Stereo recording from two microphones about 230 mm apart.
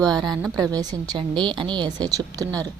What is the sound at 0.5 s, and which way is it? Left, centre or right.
Speech, centre.